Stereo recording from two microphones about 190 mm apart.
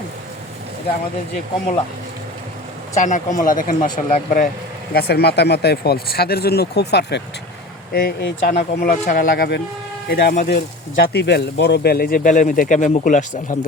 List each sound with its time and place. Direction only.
2.9 s speech: 40° left (ahead or behind)
4.9 s speech: 55° left (ahead or behind); by 13.6 s 40° left (ahead or behind)